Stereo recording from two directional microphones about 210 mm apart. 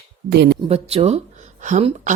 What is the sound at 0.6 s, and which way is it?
Speech, 30° right (ahead or behind).